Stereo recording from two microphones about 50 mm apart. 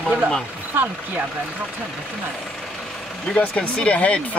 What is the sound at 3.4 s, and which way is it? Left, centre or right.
Speech, centre.